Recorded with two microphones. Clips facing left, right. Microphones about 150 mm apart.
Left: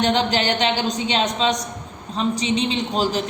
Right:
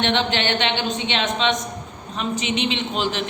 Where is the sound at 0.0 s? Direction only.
40° left (ahead or behind).